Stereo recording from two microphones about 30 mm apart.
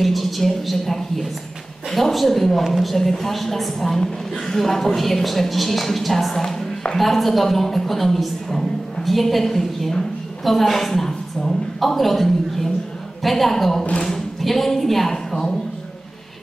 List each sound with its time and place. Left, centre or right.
0.0 s a woman's voice: centre
6.3 s speech: centre
7.0 s a woman's voice: centre
15.3 s speech: left